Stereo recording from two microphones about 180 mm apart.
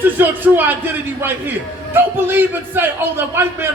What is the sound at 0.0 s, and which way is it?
A man's voice, 10° right (ahead or behind).